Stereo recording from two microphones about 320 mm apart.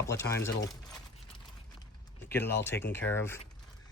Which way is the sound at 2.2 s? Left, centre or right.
Centre.